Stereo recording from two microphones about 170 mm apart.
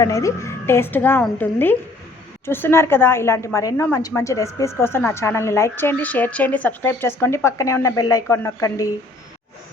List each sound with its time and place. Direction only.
0.0 s a woman's voice: 20° left (ahead or behind)